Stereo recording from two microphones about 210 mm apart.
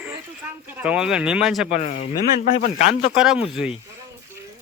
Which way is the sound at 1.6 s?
35° left (ahead or behind).